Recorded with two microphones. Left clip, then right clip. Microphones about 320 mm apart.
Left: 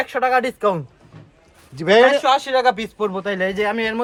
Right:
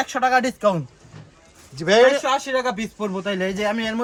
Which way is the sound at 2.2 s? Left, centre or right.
Centre.